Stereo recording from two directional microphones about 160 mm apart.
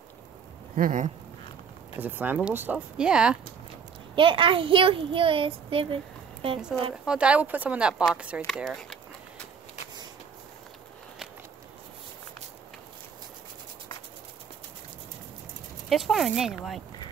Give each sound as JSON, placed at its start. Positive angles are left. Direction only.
{"t": 0.7, "sound": "speech", "side_deg": -55}
{"t": 2.0, "sound": "speech", "side_deg": -10}
{"t": 4.1, "sound": "a child's voice", "side_deg": -30}
{"t": 7.1, "sound": "speech", "side_deg": -5}
{"t": 15.9, "sound": "speech", "side_deg": 0}